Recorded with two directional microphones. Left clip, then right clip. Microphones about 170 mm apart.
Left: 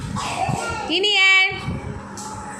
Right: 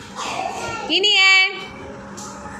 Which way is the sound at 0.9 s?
Centre (ahead or behind).